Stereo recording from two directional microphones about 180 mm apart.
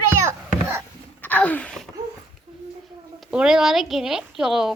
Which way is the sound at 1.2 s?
10° left (ahead or behind).